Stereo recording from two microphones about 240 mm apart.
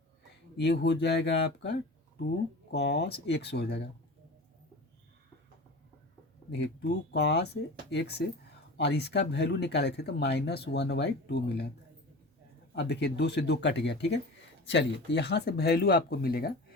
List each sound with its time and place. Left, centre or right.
0.5 s speech: left
2.7 s speech: left
7.1 s speech: left
12.7 s speech: left